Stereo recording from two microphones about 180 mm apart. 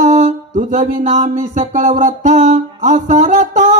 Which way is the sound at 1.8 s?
40° right (ahead or behind).